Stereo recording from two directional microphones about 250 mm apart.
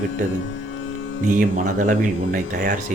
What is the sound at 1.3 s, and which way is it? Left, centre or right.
Speech, right.